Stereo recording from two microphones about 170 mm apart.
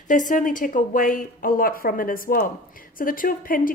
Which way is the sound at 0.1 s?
50° left (ahead or behind).